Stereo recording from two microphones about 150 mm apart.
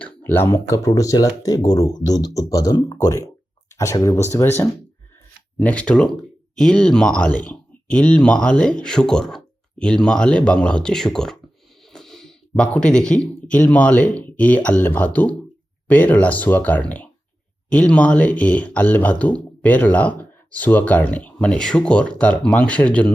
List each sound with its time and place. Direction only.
0.0 s speech: 15° left (ahead or behind)
5.5 s speech: 10° left (ahead or behind)
11.9 s a sound: centre (ahead or behind)
12.7 s speech: 5° left (ahead or behind)